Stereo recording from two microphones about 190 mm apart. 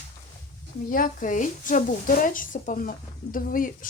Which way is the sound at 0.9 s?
45° left (ahead or behind).